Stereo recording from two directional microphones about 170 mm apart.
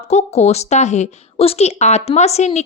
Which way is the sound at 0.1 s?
40° left (ahead or behind).